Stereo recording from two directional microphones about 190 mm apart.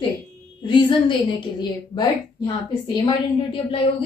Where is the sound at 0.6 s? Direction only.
25° left (ahead or behind).